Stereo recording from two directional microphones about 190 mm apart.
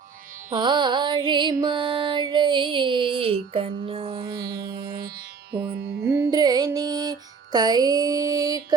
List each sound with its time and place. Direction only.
0.5 s music: 25° right (ahead or behind)
5.5 s music: 55° right (ahead or behind)
6.1 s music: 15° right (ahead or behind)